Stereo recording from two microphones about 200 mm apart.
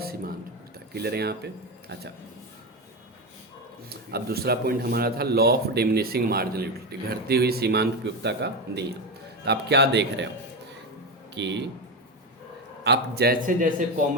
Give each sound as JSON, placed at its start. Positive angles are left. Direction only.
{"t": 0.0, "sound": "a sound", "side_deg": -50}
{"t": 0.9, "sound": "a man's voice", "side_deg": -55}
{"t": 3.8, "sound": "a man's voice", "side_deg": -50}
{"t": 11.3, "sound": "a man's voice", "side_deg": -60}
{"t": 12.8, "sound": "a man's voice", "side_deg": -55}